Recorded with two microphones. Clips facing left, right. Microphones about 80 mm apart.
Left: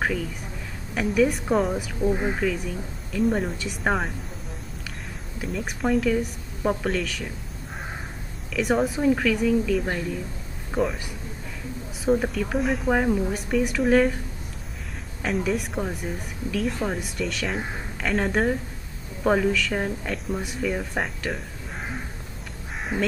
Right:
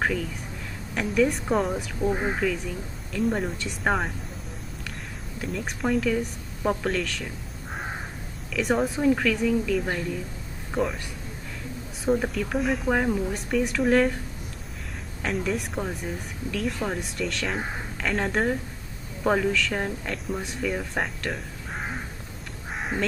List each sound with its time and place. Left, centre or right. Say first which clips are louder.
0.9 s speech: left 2 dB; centre
2.0 s speech: left 2 dB; centre
3.1 s speech: left 2 dB; centre
5.4 s speech: left 1 dB; centre
8.5 s a man's voice: left 1 dB; centre
12.1 s speech: left 2 dB; centre
15.2 s speech: left 2 dB; centre
22.8 s crow: left 1 dB; centre